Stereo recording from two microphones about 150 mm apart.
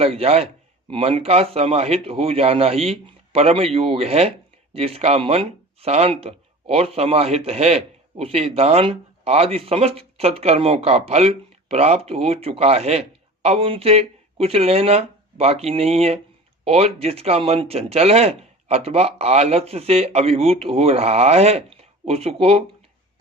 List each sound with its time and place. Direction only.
0.0 s a man's voice: 40° right (ahead or behind)